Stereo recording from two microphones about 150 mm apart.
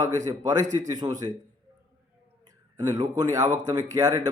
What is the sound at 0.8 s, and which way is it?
Speech, 25° right (ahead or behind).